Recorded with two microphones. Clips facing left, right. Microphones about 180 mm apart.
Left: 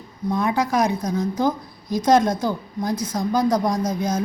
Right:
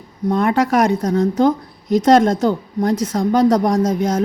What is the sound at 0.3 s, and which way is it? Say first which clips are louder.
A woman's voice: right 5 dB; 70° right (ahead or behind).